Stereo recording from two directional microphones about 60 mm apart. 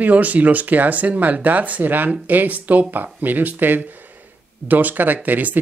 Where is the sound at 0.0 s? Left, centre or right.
Right.